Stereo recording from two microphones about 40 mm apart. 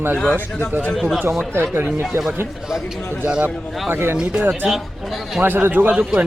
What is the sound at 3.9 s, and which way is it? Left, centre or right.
Speech, right.